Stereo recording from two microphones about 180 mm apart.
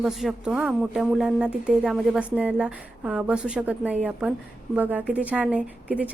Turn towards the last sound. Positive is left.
turn(degrees=-5)  # may be behind; listen again after turning